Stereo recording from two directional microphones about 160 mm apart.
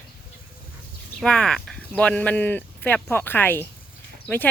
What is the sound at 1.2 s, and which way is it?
Speech, 5° left (ahead or behind).